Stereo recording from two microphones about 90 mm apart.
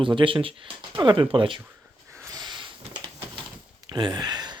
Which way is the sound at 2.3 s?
55° right (ahead or behind).